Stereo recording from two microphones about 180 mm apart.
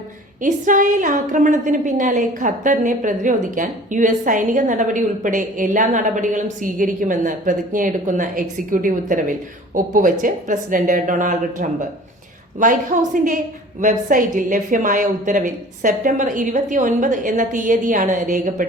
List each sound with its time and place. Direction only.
0.4 s a woman's voice: 45° right (ahead or behind)